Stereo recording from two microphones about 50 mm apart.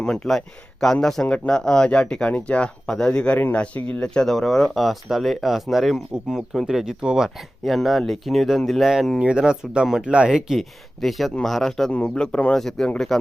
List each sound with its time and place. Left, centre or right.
0.0 s speech: centre; by 4.0 s left
4.0 s speech: centre
7.6 s speech: centre
8.8 s speech: centre
10.6 s speech: centre
12.0 s speech: centre
12.5 s speech: centre